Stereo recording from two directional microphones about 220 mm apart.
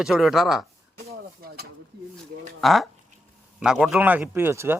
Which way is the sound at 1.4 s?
45° right (ahead or behind).